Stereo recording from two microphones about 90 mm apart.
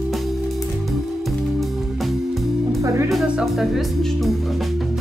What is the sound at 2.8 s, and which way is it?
Music, 40° right (ahead or behind).